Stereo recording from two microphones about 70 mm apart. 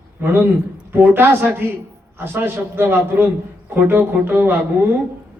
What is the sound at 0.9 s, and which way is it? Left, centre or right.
A man's voice, right.